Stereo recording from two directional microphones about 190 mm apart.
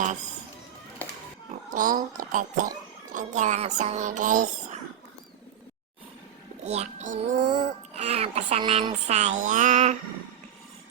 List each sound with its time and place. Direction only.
1.7 s speech: 45° right (ahead or behind)
6.7 s speech: 35° right (ahead or behind)
7.4 s music: 25° right (ahead or behind)
7.9 s speech: 35° right (ahead or behind)
9.0 s speech: 35° right (ahead or behind)